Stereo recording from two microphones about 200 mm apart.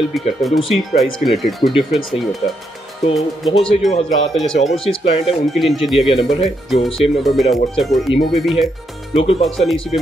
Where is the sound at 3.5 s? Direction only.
30° left (ahead or behind).